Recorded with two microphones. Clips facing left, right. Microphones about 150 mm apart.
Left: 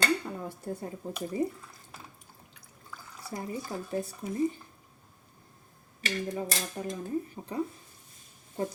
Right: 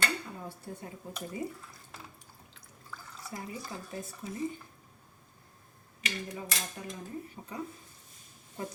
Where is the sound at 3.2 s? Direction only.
30° left (ahead or behind).